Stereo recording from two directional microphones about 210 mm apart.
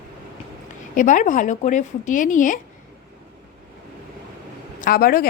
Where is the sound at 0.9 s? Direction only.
40° left (ahead or behind).